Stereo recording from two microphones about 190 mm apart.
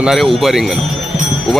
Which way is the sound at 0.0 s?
Centre (ahead or behind).